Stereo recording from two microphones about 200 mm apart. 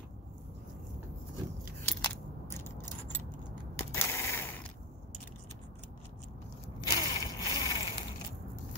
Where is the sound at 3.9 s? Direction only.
15° left (ahead or behind).